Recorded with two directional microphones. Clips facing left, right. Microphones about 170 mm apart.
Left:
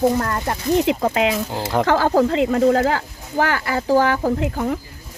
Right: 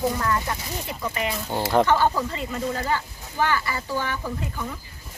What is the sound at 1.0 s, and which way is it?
Speech, 85° left.